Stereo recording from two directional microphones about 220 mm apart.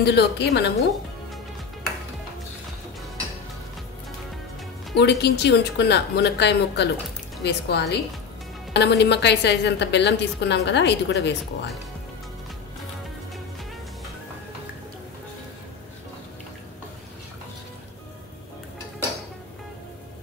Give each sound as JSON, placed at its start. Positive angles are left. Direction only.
{"t": 0.0, "sound": "a woman's voice", "side_deg": 50}
{"t": 4.9, "sound": "a woman's voice", "side_deg": 50}